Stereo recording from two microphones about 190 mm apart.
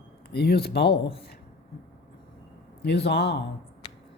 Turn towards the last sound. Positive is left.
turn(degrees=60)  # may be behind; listen again after turning